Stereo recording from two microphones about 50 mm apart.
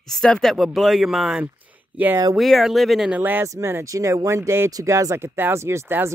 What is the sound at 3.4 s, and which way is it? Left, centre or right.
Speech, right.